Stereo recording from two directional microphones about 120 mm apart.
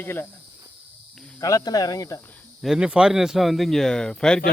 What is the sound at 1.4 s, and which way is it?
Speech, 30° left (ahead or behind).